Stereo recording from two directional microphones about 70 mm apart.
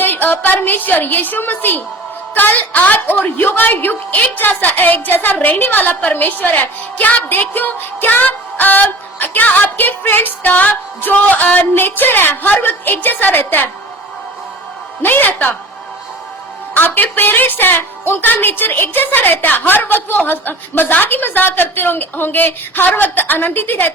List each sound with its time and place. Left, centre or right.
0.0 s a woman's voice: left
15.0 s a woman's voice: left
16.7 s a woman's voice: left